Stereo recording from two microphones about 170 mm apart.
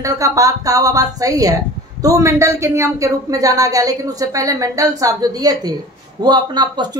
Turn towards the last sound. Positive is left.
turn(degrees=-25)  # may be behind; listen again after turning